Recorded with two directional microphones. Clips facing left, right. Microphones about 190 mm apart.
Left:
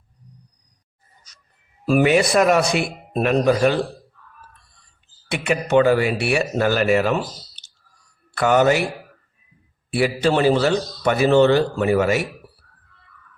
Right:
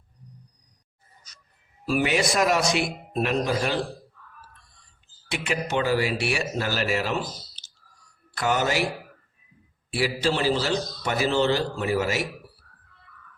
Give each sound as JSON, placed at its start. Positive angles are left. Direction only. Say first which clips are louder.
{"t": 1.9, "sound": "a man's voice", "louder": "left 7 dB", "side_deg": 55}
{"t": 5.3, "sound": "a man's voice", "louder": "left 9 dB", "side_deg": 60}
{"t": 8.4, "sound": "a man's voice", "louder": "left 8 dB", "side_deg": 60}
{"t": 9.9, "sound": "a man's voice", "louder": "left 6 dB", "side_deg": 60}